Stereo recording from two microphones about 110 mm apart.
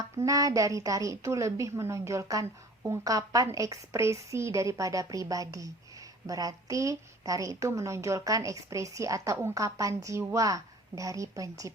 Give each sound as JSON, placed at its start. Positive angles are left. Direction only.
{"t": 0.3, "sound": "a woman's voice", "side_deg": -30}